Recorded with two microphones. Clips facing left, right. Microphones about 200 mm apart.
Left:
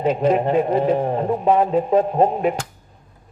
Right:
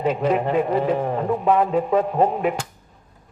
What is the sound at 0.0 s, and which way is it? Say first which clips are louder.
A man's voice: left 3 dB; 25° left (ahead or behind).